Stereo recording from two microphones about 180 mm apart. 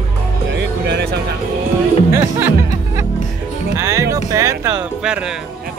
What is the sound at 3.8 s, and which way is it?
Music, 15° right (ahead or behind).